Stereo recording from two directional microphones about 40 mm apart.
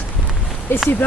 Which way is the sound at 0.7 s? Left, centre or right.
Left.